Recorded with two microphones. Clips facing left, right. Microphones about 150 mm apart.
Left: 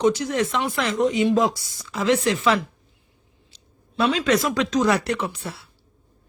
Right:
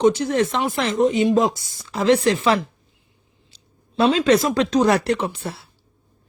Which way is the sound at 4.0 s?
30° right (ahead or behind).